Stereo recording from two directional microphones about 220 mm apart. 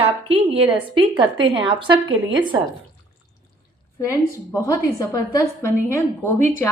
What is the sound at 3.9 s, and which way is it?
A woman's voice, 15° left (ahead or behind).